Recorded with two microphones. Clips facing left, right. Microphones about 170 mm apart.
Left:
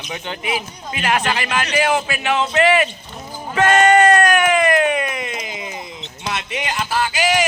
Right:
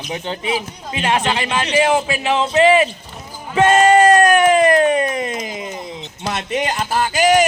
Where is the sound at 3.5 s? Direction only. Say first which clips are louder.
Right 2 dB; 30° right (ahead or behind).